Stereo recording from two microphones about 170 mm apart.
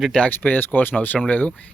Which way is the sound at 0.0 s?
5° left (ahead or behind).